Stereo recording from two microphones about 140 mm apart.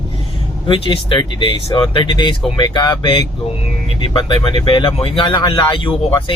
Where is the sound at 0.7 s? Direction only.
40° left (ahead or behind).